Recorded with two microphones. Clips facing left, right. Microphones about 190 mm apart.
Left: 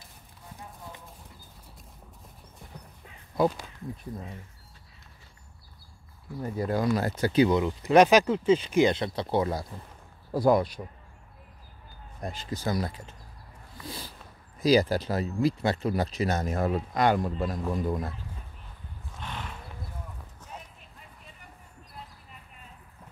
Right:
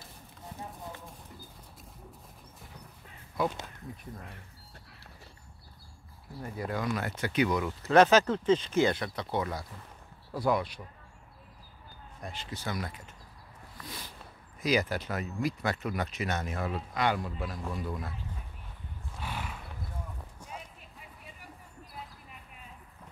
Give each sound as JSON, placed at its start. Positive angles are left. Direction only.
{"t": 6.4, "sound": "speech", "side_deg": 35}
{"t": 12.2, "sound": "speech", "side_deg": 40}
{"t": 13.7, "sound": "a sound", "side_deg": 30}
{"t": 14.6, "sound": "speech", "side_deg": 35}
{"t": 19.1, "sound": "horse", "side_deg": -10}
{"t": 20.3, "sound": "clip-clop", "side_deg": -10}